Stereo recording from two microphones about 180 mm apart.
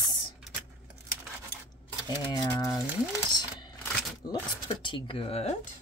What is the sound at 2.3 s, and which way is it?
Speech, 20° left (ahead or behind).